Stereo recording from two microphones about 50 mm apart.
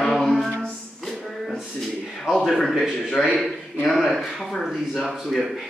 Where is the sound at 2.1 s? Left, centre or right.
Centre.